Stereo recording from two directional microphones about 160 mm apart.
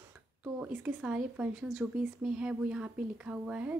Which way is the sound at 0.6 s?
10° right (ahead or behind).